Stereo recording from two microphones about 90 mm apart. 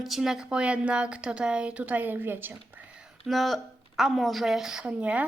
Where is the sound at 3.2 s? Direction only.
Centre (ahead or behind); by 5.2 s 15° right (ahead or behind).